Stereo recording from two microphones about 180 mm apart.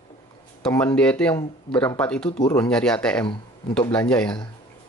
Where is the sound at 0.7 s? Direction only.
10° left (ahead or behind).